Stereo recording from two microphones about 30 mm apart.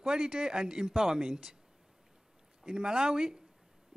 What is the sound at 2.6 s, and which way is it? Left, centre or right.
Speech, right.